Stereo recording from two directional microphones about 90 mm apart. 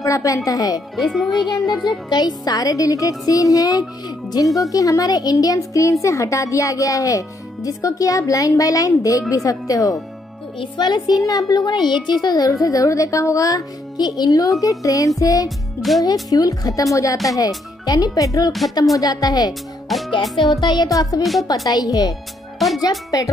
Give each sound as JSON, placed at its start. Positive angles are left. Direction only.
{"t": 0.0, "sound": "a woman's voice", "side_deg": 40}
{"t": 0.9, "sound": "a child's voice", "side_deg": 0}
{"t": 2.0, "sound": "a woman's voice", "side_deg": 50}
{"t": 10.8, "sound": "a woman's voice", "side_deg": 50}
{"t": 19.9, "sound": "a child's voice", "side_deg": 0}
{"t": 20.6, "sound": "a woman's voice", "side_deg": 50}
{"t": 21.2, "sound": "a child's voice", "side_deg": 0}
{"t": 21.6, "sound": "a woman's voice", "side_deg": 45}